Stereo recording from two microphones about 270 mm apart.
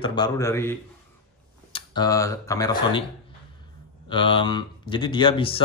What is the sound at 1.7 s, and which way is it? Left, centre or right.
Speech, centre.